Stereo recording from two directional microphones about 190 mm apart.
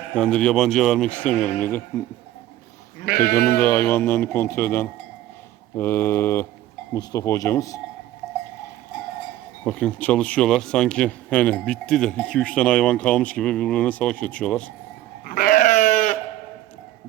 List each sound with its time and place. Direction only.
0.1 s speech: 5° left (ahead or behind)
3.1 s speech: 55° left (ahead or behind)
3.6 s speech: 10° left (ahead or behind)
9.6 s speech: 5° left (ahead or behind)
15.2 s goat: 45° left (ahead or behind)